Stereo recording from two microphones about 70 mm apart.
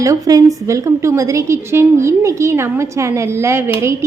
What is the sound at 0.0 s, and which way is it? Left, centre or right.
A woman's voice, right.